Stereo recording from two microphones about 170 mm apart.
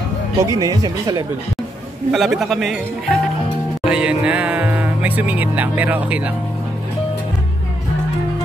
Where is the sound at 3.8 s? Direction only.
5° right (ahead or behind).